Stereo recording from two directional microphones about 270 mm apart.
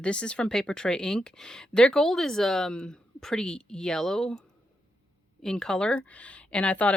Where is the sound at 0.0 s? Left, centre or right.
Centre.